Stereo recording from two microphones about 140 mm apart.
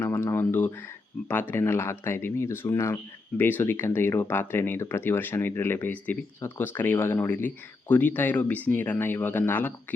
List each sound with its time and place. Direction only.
0.0 s speech: 20° left (ahead or behind)